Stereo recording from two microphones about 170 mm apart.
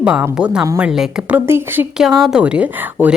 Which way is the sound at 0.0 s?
5° right (ahead or behind).